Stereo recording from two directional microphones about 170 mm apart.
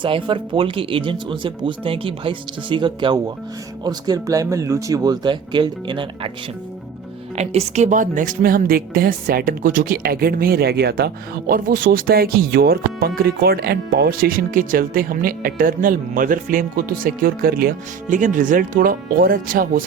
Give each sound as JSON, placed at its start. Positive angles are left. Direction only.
{"t": 0.0, "sound": "speech", "side_deg": -30}
{"t": 7.3, "sound": "a woman's voice", "side_deg": -40}